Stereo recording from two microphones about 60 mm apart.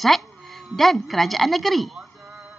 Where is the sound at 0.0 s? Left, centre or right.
Centre.